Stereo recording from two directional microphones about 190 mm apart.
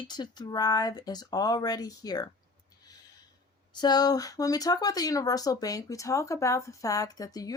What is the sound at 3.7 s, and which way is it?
A woman's voice, 20° left (ahead or behind).